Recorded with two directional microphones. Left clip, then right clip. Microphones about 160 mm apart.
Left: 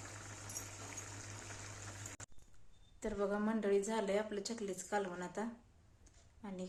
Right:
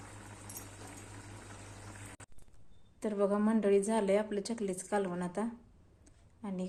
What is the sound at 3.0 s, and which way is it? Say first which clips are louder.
A woman's voice: right 6 dB; 30° right (ahead or behind).